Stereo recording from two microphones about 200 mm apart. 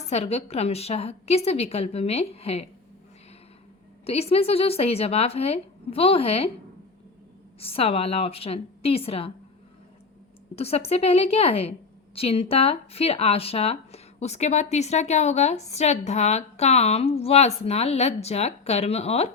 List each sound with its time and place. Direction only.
0.1 s speech: 30° left (ahead or behind)
4.0 s a woman's voice: 30° left (ahead or behind)
7.6 s a woman's voice: 30° left (ahead or behind)
10.5 s speech: 30° left (ahead or behind)